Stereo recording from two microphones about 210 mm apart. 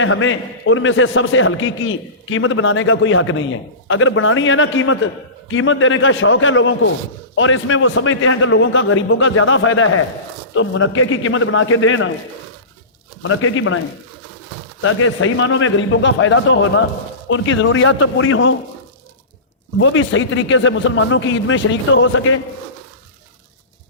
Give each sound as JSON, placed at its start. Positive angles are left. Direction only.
{"t": 0.0, "sound": "a man's voice", "side_deg": 70}
{"t": 13.2, "sound": "a man's voice", "side_deg": 70}
{"t": 19.8, "sound": "speech", "side_deg": 70}